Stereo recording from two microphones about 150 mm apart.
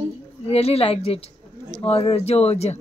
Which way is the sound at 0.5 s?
45° left (ahead or behind).